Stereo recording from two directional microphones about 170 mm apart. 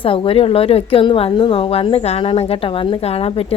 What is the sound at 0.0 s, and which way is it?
A woman's voice, 30° left (ahead or behind).